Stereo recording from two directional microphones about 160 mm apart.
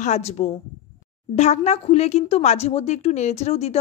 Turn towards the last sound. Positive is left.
turn(degrees=40)  # may be behind; listen again after turning